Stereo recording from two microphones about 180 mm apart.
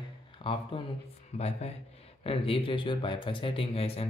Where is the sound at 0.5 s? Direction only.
30° left (ahead or behind).